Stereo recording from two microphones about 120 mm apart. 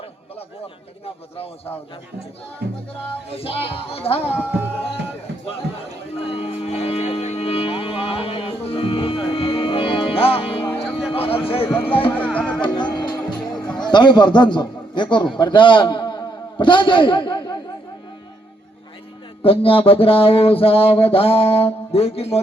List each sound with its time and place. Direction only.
3.2 s mantra: 55° left (ahead or behind)
4.3 s speech: 15° right (ahead or behind)
6.1 s music: 55° left (ahead or behind)
11.1 s a sound: 50° left (ahead or behind)
11.8 s music: 50° left (ahead or behind)
12.1 s music: 10° left (ahead or behind)
12.6 s music: 40° left (ahead or behind)
13.7 s a man's voice: 40° left (ahead or behind)
19.4 s mantra: 50° left (ahead or behind)